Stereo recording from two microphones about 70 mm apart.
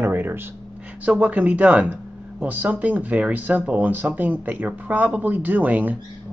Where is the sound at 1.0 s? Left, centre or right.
Centre.